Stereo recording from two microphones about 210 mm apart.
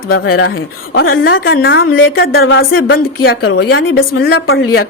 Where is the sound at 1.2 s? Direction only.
50° left (ahead or behind).